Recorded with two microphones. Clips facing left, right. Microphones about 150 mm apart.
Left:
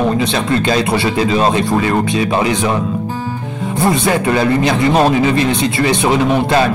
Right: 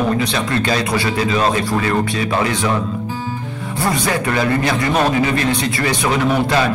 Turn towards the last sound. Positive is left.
turn(degrees=25)  # may be behind; listen again after turning